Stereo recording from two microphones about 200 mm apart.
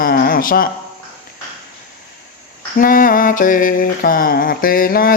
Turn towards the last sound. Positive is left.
turn(degrees=45)  # may be behind; listen again after turning